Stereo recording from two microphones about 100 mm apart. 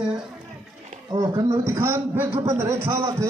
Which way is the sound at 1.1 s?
40° right (ahead or behind).